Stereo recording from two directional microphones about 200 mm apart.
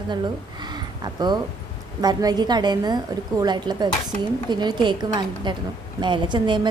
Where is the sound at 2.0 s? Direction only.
20° right (ahead or behind).